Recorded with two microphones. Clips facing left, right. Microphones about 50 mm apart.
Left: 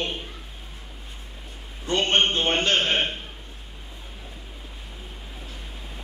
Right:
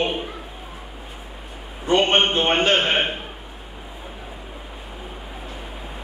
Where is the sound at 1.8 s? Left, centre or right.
Centre.